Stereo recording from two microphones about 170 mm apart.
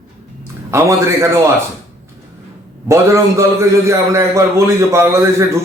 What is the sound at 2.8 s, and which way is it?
A man's voice, 20° right (ahead or behind).